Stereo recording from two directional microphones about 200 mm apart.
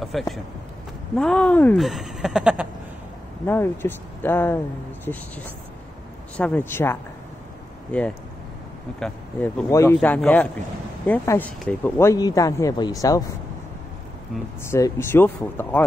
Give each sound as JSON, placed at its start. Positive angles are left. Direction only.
{"t": 0.0, "sound": "speech", "side_deg": 0}
{"t": 3.4, "sound": "speech", "side_deg": 10}
{"t": 6.3, "sound": "speech", "side_deg": 5}
{"t": 9.7, "sound": "speech", "side_deg": 15}
{"t": 14.6, "sound": "speech", "side_deg": 15}